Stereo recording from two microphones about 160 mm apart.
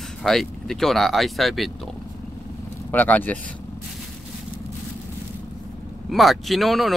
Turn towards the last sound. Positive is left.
turn(degrees=0)  # may be behind; listen again after turning